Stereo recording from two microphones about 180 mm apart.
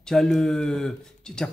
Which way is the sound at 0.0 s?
5° left (ahead or behind).